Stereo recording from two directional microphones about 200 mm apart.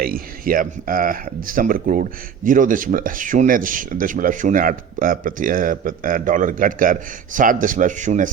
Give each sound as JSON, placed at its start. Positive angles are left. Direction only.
{"t": 0.0, "sound": "speech", "side_deg": -45}